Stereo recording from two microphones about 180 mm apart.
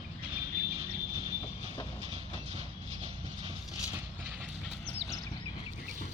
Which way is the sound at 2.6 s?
35° right (ahead or behind).